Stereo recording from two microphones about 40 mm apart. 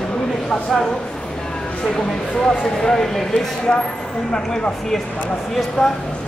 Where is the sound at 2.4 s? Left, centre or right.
Centre.